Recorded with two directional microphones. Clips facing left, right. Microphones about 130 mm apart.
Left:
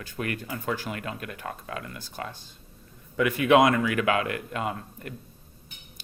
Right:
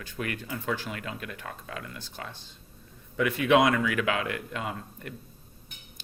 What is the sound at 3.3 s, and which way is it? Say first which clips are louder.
Speech: left 3 dB; 50° left (ahead or behind).